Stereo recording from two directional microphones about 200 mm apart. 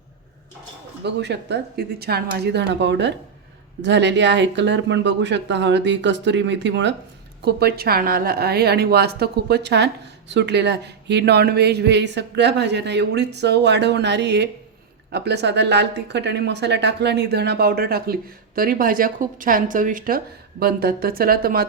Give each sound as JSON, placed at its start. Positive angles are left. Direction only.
{"t": 1.0, "sound": "a woman's voice", "side_deg": -60}
{"t": 7.4, "sound": "a woman's voice", "side_deg": -50}